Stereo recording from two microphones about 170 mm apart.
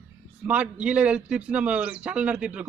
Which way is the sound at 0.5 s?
5° right (ahead or behind).